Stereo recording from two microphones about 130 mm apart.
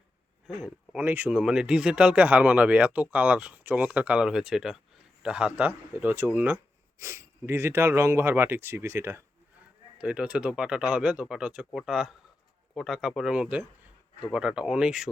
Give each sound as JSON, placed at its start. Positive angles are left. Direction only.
{"t": 0.4, "sound": "speech", "side_deg": -10}
{"t": 10.0, "sound": "speech", "side_deg": -10}